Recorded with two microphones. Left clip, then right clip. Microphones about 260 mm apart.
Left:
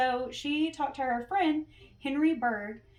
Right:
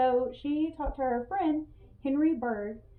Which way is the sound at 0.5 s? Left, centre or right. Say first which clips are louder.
Left 5 dB; left.